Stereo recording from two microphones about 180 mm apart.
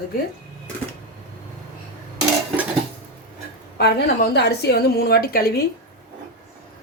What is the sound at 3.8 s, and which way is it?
A woman's voice, 60° left (ahead or behind).